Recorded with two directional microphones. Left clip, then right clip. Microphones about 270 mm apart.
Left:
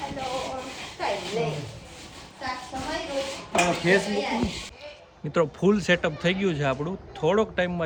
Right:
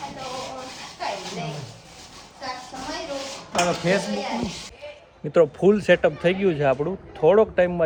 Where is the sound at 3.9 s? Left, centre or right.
Centre.